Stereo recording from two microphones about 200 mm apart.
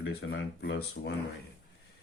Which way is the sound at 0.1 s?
55° left (ahead or behind).